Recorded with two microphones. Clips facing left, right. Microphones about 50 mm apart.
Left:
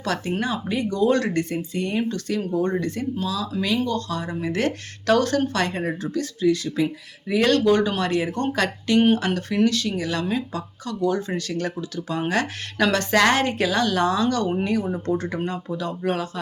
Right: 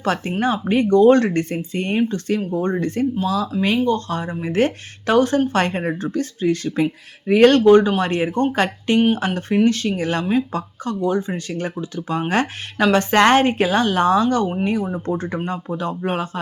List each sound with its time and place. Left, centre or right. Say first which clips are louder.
0.0 s speech: right 5 dB; right
5.5 s speech: right 4 dB; right
11.0 s speech: right 1 dB; right